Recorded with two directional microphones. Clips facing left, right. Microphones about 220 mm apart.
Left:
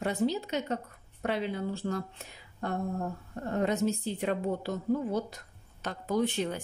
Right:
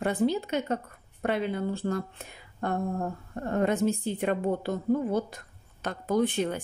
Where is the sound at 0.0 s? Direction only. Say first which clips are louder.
Right 3 dB; 55° right (ahead or behind).